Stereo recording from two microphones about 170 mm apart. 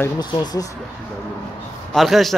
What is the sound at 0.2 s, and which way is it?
Speech, 25° left (ahead or behind).